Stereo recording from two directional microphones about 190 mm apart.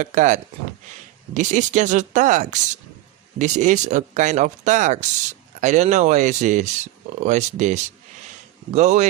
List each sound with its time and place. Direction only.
0.0 s speech: 40° right (ahead or behind)